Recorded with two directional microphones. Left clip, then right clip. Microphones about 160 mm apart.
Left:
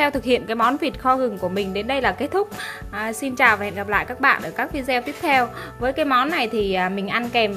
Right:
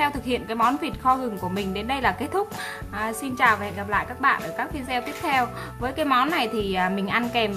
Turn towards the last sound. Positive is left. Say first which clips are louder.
# left 3 dB
turn(degrees=20)  # may be behind; listen again after turning